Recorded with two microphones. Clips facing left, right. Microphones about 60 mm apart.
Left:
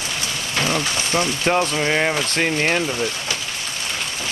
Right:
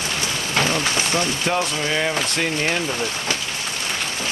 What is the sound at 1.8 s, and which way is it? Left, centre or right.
Speech, left.